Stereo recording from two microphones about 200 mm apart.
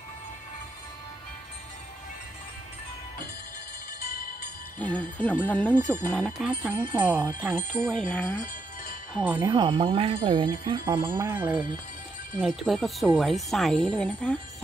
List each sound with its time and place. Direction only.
4.7 s speech: 5° left (ahead or behind); by 7.6 s 10° right (ahead or behind)
7.9 s speech: 5° left (ahead or behind)
9.1 s speech: 10° right (ahead or behind)
9.5 s speech: 25° right (ahead or behind)
11.1 s speech: 10° right (ahead or behind); by 14.4 s 5° left (ahead or behind)